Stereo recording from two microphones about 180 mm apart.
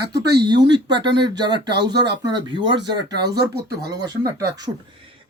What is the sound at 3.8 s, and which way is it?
Speech, 20° right (ahead or behind).